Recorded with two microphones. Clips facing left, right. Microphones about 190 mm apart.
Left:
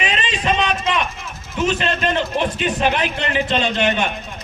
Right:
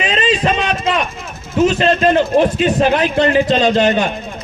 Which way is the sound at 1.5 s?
40° right (ahead or behind).